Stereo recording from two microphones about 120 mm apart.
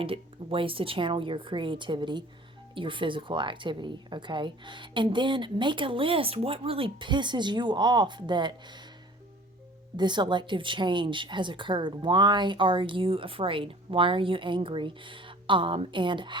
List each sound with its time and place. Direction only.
0.0 s a woman's voice: 50° right (ahead or behind)
10.0 s speech: 40° right (ahead or behind)